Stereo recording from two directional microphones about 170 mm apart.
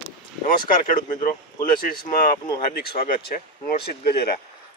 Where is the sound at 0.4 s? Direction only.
55° left (ahead or behind).